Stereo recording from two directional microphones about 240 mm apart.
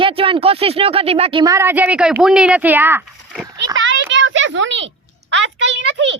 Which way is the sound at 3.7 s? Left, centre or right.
Right.